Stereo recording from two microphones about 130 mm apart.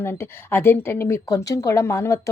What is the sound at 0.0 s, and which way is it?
Speech, 20° left (ahead or behind).